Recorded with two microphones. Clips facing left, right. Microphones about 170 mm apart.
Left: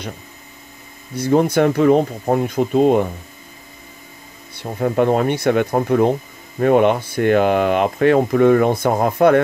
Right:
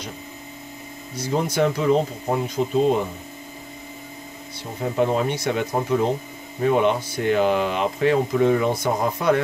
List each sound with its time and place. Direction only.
1.1 s speech: 55° left (ahead or behind)
4.7 s speech: 60° left (ahead or behind)